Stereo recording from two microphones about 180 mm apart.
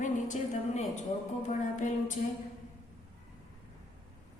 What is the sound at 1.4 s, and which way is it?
Speech, 40° left (ahead or behind).